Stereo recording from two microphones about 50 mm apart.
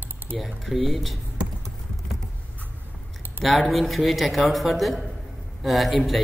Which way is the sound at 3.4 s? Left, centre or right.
Right.